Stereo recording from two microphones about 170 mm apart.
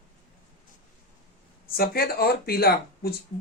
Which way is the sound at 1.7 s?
60° left (ahead or behind).